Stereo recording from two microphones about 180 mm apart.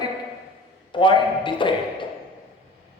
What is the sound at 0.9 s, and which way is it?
Speech, 25° left (ahead or behind).